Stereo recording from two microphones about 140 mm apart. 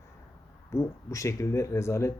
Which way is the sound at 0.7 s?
20° left (ahead or behind).